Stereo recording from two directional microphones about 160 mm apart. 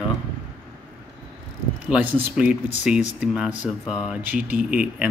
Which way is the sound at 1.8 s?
10° right (ahead or behind).